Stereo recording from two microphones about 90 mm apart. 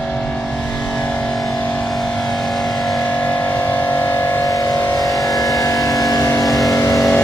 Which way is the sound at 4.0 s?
30° left (ahead or behind).